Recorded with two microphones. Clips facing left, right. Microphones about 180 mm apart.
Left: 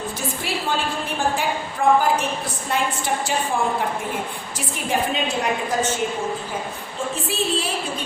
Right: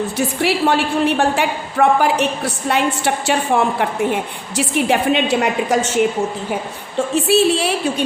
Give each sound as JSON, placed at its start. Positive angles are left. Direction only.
{"t": 0.2, "sound": "a woman's voice", "side_deg": -70}
{"t": 7.3, "sound": "a woman's voice", "side_deg": -75}